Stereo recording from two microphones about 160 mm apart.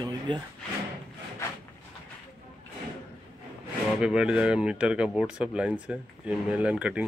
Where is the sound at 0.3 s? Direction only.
30° right (ahead or behind).